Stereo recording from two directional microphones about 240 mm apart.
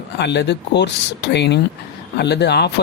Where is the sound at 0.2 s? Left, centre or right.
Left.